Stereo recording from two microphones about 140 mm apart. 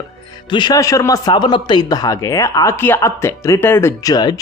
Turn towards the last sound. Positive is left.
turn(degrees=30)  # may be behind; listen again after turning